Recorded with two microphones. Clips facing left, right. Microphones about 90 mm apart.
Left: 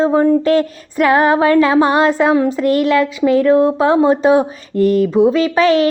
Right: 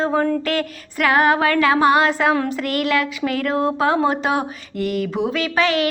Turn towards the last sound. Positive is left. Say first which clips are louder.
# left 7 dB
turn(degrees=30)  # may be behind; listen again after turning